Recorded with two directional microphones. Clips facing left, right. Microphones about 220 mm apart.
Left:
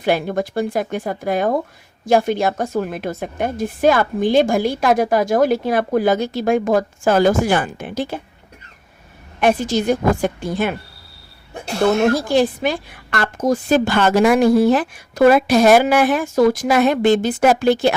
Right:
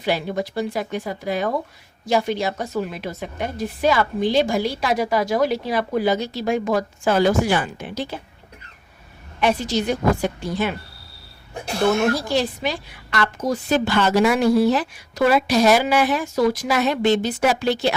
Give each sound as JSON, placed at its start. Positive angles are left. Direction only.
{"t": 0.0, "sound": "a woman's voice", "side_deg": 50}
{"t": 9.4, "sound": "a woman's voice", "side_deg": 50}
{"t": 12.1, "sound": "a woman's voice", "side_deg": 50}